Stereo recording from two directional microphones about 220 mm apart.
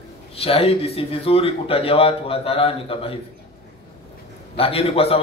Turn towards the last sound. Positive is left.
turn(degrees=25)  # may be behind; listen again after turning